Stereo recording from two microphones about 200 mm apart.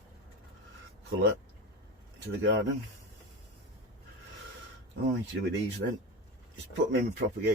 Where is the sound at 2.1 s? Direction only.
65° right (ahead or behind).